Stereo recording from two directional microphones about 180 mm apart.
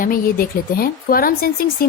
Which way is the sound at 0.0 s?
55° left (ahead or behind).